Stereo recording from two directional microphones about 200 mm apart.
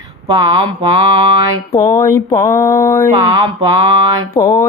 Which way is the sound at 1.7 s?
15° left (ahead or behind).